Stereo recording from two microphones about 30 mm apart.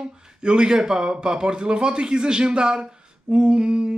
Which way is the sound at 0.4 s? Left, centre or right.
Right.